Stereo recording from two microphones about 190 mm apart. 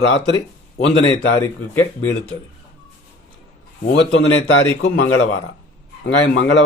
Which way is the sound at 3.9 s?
75° left (ahead or behind).